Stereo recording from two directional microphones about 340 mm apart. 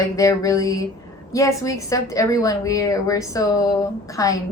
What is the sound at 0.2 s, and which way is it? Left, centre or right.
A woman's voice, centre.